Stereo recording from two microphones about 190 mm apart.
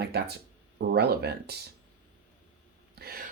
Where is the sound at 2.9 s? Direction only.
55° right (ahead or behind).